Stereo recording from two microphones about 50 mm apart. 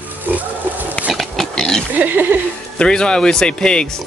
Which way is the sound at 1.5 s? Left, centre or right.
Centre.